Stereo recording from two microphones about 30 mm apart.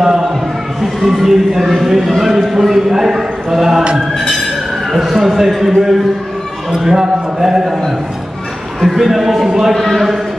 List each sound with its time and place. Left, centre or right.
0.0 s a sound: centre
1.0 s speech: centre
4.2 s music: centre
5.0 s speech: centre
8.8 s a man's voice: centre
9.8 s a man's voice: centre